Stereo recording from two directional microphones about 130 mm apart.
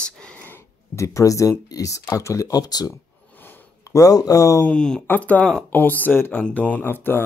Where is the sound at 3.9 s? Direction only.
25° left (ahead or behind).